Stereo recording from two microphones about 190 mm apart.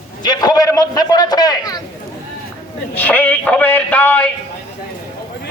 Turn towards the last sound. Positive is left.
turn(degrees=10)  # may be behind; listen again after turning